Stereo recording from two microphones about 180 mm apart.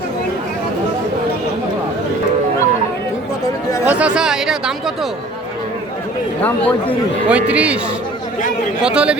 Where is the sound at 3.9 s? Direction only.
5° right (ahead or behind).